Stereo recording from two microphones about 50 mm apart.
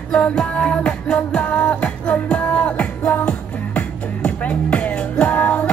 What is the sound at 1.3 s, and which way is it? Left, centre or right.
Music, left.